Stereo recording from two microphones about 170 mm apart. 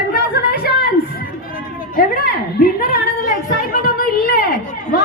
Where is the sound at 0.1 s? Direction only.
65° left (ahead or behind).